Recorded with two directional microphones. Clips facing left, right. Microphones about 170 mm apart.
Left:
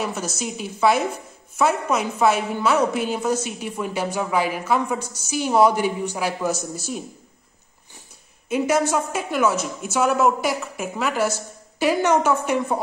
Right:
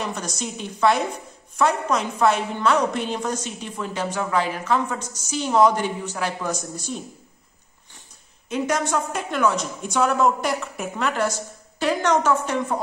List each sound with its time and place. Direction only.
0.0 s a woman's voice: 5° left (ahead or behind)
8.5 s a woman's voice: 10° left (ahead or behind)